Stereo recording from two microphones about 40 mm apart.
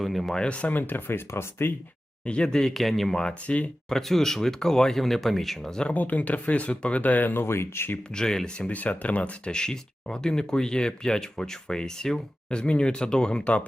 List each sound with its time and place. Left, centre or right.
0.0 s speech: centre
0.3 s speech: left
0.6 s speech: left
2.2 s speech: left
2.5 s speech: centre
3.4 s speech: left
3.8 s speech: centre
5.6 s speech: centre
5.9 s speech: left
8.1 s speech: centre
8.5 s speech: left
8.8 s speech: left
9.5 s speech: centre
12.5 s speech: left